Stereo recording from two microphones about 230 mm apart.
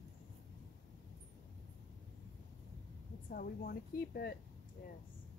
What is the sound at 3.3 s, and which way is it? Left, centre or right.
A woman's voice, left.